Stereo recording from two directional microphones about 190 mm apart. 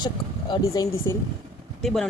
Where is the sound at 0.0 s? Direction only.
25° left (ahead or behind).